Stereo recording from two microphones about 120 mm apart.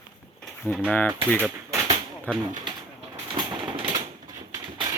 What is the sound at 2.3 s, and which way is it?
Speech, 15° left (ahead or behind).